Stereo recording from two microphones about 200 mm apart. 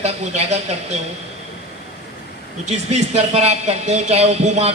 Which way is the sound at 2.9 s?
35° right (ahead or behind).